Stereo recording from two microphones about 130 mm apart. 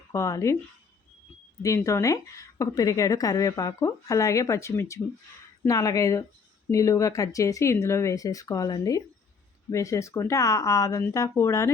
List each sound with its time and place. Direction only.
0.1 s a woman's voice: 25° left (ahead or behind)
1.6 s a woman's voice: 25° left (ahead or behind)